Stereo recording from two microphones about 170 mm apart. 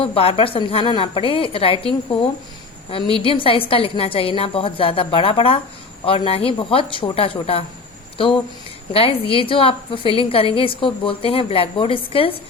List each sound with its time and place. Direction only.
0.0 s a woman's voice: 35° left (ahead or behind)
2.9 s a woman's voice: 30° left (ahead or behind)
8.9 s a woman's voice: 35° left (ahead or behind)